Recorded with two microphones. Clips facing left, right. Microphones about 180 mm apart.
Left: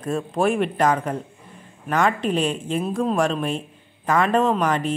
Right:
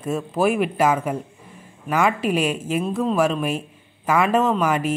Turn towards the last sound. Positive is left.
turn(degrees=-10)  # may be behind; listen again after turning